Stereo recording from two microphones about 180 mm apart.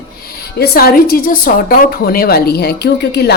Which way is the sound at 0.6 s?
55° left (ahead or behind).